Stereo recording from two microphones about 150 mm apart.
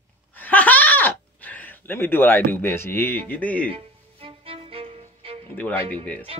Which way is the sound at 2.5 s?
15° left (ahead or behind).